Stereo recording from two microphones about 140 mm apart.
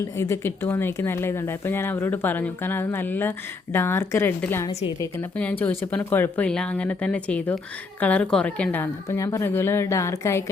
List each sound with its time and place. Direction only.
0.2 s speech: 15° left (ahead or behind)